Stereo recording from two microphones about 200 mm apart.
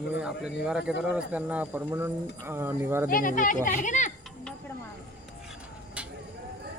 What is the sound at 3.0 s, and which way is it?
Speech, 45° left (ahead or behind).